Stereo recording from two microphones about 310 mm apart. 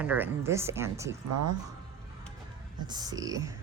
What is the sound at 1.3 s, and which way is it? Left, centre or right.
Speech, right.